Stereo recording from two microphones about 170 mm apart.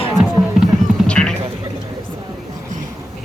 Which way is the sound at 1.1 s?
5° left (ahead or behind).